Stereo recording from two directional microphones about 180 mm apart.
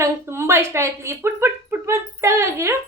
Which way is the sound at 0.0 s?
15° right (ahead or behind).